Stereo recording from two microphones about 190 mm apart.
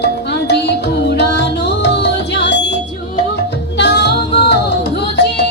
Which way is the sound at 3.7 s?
65° left (ahead or behind).